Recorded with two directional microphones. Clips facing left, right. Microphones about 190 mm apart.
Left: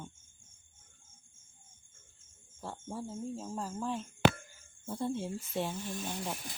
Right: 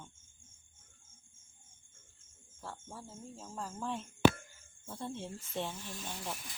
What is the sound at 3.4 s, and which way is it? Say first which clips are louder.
Speech: left 5 dB; 15° left (ahead or behind).